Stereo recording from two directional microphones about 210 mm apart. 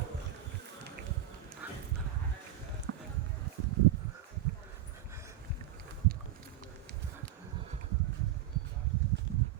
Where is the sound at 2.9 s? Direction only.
55° right (ahead or behind).